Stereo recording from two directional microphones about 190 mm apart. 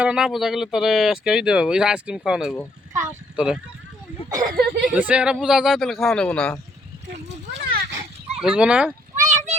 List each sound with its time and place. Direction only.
0.0 s speech: 5° right (ahead or behind)
3.0 s a sound: 5° right (ahead or behind)
4.4 s speech: 50° right (ahead or behind)
4.9 s speech: 5° right (ahead or behind)
7.1 s a child's voice: 60° right (ahead or behind)
8.4 s speech: 5° right (ahead or behind)
9.1 s a sound: 40° right (ahead or behind)